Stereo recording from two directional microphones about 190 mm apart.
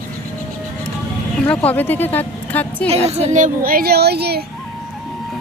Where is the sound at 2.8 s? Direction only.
35° right (ahead or behind); by 4.4 s 55° right (ahead or behind).